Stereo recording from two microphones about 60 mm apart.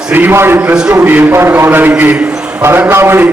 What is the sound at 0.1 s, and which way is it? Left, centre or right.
Speech, right.